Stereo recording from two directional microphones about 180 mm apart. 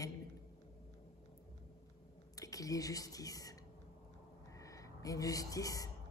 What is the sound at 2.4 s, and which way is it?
Speech, 20° left (ahead or behind).